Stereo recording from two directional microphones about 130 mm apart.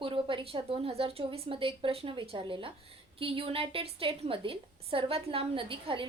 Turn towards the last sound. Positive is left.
turn(degrees=-45)  # may be behind; listen again after turning